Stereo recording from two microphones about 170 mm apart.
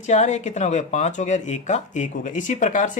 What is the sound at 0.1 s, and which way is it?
Speech, 45° left (ahead or behind).